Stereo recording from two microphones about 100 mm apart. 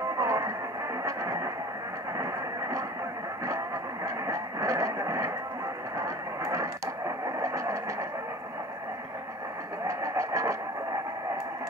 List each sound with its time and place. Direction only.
0.2 s music: 30° right (ahead or behind)
3.4 s vehicle: 30° right (ahead or behind)
5.9 s radio: 30° right (ahead or behind)
9.8 s vehicle: 30° right (ahead or behind)